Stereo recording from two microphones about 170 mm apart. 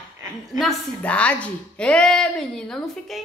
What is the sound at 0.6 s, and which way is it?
A woman's voice, 5° left (ahead or behind).